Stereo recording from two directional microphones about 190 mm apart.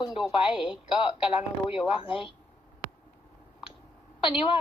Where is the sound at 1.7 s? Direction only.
30° left (ahead or behind).